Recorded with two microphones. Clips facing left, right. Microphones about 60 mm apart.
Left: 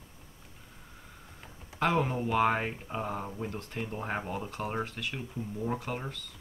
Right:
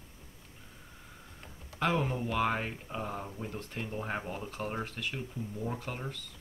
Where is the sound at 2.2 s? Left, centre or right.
Centre.